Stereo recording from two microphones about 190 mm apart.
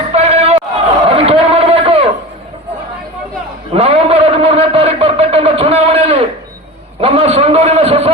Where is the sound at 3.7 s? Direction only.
30° right (ahead or behind).